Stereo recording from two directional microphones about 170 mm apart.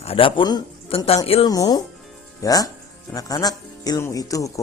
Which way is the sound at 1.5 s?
20° left (ahead or behind).